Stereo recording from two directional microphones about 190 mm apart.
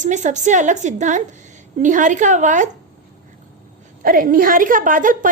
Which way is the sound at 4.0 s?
50° right (ahead or behind).